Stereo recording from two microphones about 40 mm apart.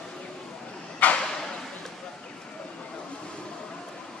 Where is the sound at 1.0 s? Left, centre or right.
Left.